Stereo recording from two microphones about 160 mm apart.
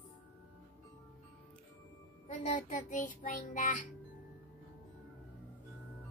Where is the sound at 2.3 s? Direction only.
55° left (ahead or behind).